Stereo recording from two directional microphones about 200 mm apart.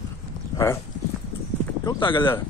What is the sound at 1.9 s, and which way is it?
Speech, 25° left (ahead or behind).